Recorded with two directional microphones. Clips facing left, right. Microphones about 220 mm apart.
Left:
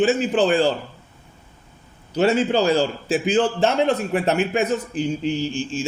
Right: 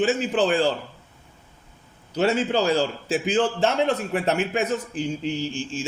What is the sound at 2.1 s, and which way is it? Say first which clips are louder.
A man's voice: left 3 dB; 20° left (ahead or behind).